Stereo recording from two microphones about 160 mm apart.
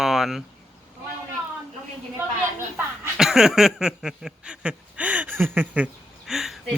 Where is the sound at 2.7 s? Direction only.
5° right (ahead or behind).